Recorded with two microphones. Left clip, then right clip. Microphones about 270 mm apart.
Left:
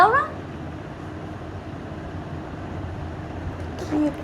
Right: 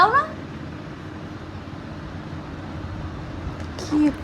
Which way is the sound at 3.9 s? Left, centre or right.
Centre.